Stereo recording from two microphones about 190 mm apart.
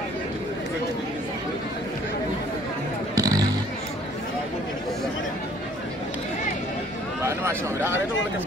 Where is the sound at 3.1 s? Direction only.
20° right (ahead or behind).